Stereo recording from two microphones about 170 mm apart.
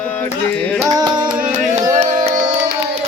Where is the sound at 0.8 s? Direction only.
20° right (ahead or behind).